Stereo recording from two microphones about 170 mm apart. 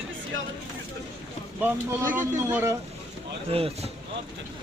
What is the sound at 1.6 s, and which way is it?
Speech, 10° right (ahead or behind).